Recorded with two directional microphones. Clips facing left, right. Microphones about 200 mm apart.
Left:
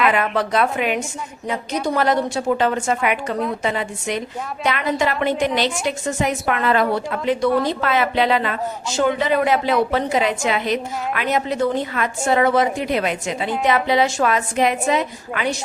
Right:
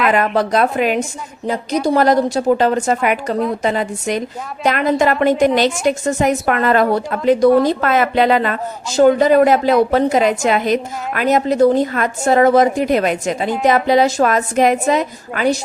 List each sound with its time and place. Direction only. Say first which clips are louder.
0.1 s a woman's voice: right 4 dB; 40° right (ahead or behind)